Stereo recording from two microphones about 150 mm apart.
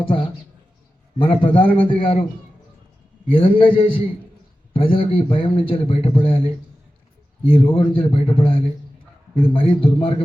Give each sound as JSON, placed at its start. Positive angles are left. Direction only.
{"t": 1.2, "sound": "a man's voice", "side_deg": 35}
{"t": 3.2, "sound": "a man's voice", "side_deg": 35}